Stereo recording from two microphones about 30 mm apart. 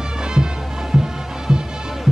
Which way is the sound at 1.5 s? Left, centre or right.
Right.